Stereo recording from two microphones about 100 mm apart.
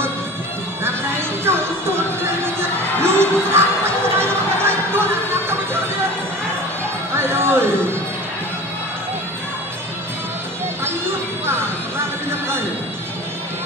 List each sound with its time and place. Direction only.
0.8 s music: 25° right (ahead or behind)
3.0 s a sound: 25° right (ahead or behind)
4.2 s music: 25° right (ahead or behind)
7.2 s music: 25° right (ahead or behind)
12.3 s music: 25° right (ahead or behind)